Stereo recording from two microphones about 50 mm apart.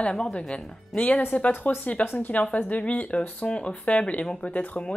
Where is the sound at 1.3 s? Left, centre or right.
Left.